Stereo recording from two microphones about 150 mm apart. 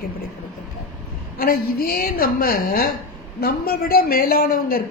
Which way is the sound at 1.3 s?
80° left.